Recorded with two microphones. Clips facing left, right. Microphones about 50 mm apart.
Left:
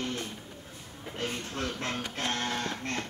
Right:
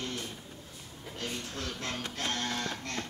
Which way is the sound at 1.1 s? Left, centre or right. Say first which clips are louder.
Left 4 dB; left.